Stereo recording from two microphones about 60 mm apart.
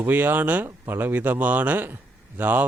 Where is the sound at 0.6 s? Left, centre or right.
Right.